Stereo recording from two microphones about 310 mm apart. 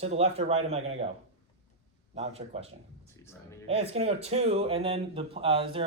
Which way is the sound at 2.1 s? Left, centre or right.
Centre.